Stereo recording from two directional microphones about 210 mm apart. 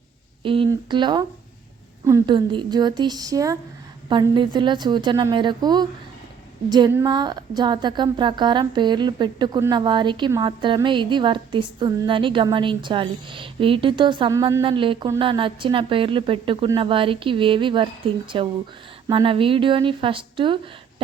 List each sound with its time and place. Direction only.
0.4 s speech: 25° right (ahead or behind)